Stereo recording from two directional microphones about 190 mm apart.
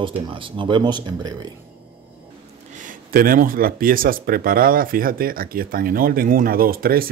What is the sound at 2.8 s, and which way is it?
Speech, 50° right (ahead or behind).